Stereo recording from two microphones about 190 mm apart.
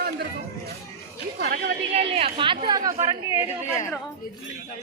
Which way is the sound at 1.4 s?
55° right (ahead or behind).